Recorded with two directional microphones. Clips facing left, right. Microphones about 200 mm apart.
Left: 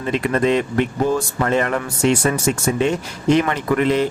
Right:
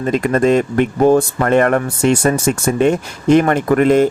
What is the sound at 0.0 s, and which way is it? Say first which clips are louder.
Speech: right 4 dB; 45° right (ahead or behind).